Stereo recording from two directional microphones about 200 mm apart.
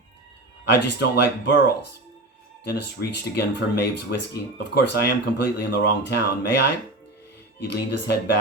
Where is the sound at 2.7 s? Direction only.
55° left (ahead or behind).